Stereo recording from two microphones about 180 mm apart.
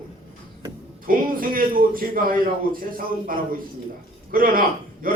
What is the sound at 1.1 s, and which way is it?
A man's voice, 50° right (ahead or behind).